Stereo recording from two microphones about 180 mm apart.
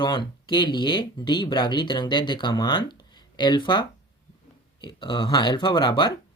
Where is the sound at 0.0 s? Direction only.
25° left (ahead or behind).